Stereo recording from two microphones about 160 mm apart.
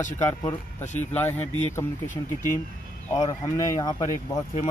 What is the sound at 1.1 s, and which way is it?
Speech, 10° left (ahead or behind).